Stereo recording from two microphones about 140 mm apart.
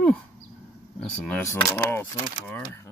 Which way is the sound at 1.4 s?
20° left (ahead or behind).